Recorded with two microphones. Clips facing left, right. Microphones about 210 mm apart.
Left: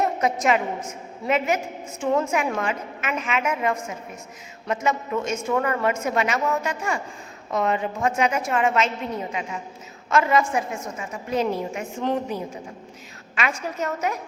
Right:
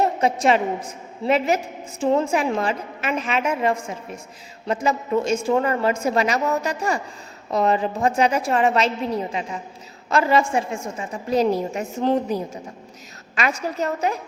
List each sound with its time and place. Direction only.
0.0 s a woman's voice: 30° right (ahead or behind)